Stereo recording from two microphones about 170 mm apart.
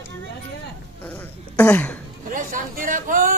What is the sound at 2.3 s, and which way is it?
Speech, 55° right (ahead or behind).